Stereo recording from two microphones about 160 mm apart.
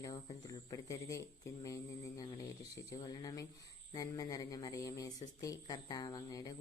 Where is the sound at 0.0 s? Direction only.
25° left (ahead or behind).